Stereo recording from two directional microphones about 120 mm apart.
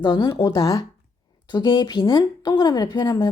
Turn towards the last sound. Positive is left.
turn(degrees=30)  # may be behind; listen again after turning